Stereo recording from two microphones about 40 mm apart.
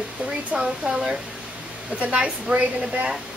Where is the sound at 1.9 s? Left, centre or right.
Right.